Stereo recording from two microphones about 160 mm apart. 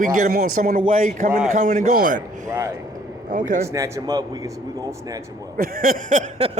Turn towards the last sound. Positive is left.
turn(degrees=-50)  # may be behind; listen again after turning